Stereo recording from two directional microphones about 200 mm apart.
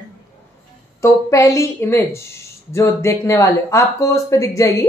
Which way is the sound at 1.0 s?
15° left (ahead or behind).